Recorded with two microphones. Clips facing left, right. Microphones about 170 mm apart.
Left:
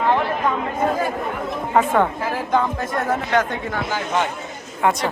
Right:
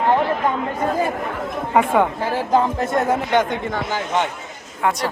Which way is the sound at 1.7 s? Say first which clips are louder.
Right 1 dB; 10° right (ahead or behind).